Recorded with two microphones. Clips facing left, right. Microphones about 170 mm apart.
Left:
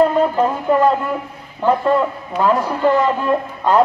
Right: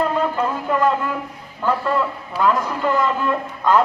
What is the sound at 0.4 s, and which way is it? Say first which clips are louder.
Speech: left 5 dB; 35° left (ahead or behind).